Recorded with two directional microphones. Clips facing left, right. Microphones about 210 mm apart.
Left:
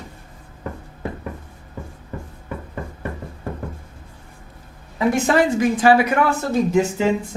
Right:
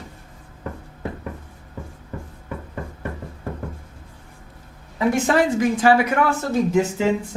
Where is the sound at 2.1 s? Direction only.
25° left (ahead or behind).